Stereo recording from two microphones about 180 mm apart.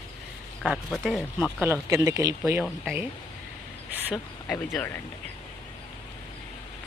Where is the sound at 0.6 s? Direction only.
5° right (ahead or behind).